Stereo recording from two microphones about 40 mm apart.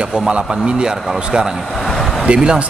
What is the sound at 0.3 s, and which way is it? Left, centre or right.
A man's voice, right.